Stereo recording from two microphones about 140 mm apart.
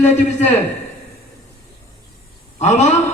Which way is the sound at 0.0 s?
55° left (ahead or behind).